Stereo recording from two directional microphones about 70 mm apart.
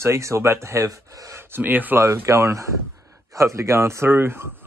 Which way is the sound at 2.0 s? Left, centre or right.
Right.